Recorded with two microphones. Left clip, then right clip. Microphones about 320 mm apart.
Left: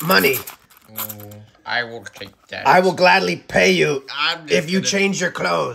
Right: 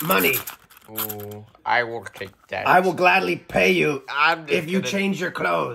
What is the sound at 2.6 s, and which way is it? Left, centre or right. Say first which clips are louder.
Speech: left 4 dB; left.